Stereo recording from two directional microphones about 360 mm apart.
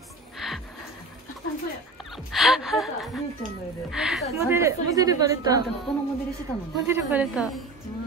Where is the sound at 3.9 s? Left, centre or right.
Centre.